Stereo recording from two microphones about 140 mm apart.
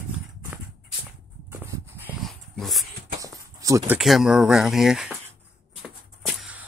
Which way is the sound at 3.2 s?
25° right (ahead or behind).